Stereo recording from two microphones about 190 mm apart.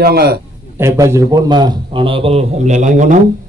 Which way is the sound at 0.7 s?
15° right (ahead or behind).